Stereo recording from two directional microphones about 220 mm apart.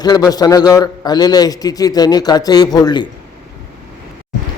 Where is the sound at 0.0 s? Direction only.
20° left (ahead or behind).